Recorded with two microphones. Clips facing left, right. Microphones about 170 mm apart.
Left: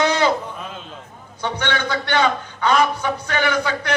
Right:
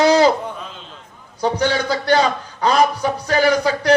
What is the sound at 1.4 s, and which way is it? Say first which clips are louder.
A man's voice: right 5 dB; 35° right (ahead or behind).